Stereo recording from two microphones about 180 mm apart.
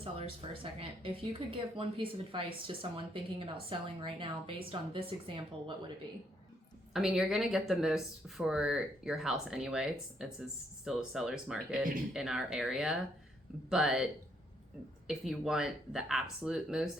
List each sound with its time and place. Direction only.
0.0 s speech: 30° right (ahead or behind)
6.9 s speech: 5° right (ahead or behind)